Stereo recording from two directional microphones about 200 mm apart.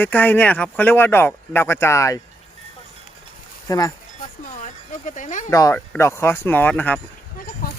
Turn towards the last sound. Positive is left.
turn(degrees=10)  # may be behind; listen again after turning